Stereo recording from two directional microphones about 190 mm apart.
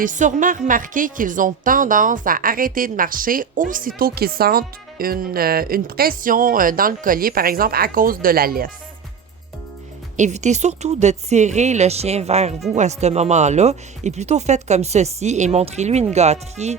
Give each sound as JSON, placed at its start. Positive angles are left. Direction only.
{"t": 0.0, "sound": "a woman's voice", "side_deg": -40}
{"t": 10.2, "sound": "speech", "side_deg": -40}